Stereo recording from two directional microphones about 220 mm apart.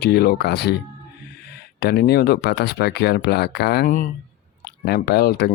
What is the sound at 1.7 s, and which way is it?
Speech, 45° left (ahead or behind).